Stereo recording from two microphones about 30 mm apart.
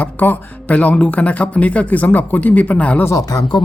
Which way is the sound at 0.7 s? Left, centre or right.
Left.